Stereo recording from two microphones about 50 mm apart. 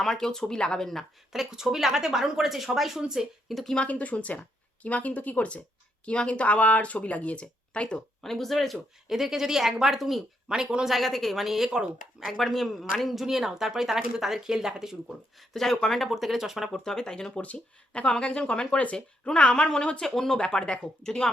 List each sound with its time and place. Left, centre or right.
0.0 s speech: centre
1.3 s speech: centre
3.5 s speech: centre
3.8 s speech: left
8.2 s speech: centre
10.5 s speech: centre
10.8 s speech: centre
12.3 s speech: centre
15.4 s speech: centre
16.0 s speech: centre
16.7 s speech: centre
17.4 s speech: left